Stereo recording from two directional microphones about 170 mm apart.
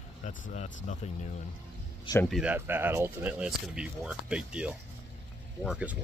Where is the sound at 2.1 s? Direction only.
25° left (ahead or behind).